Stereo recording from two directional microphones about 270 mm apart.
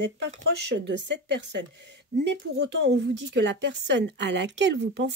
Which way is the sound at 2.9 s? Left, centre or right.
Right.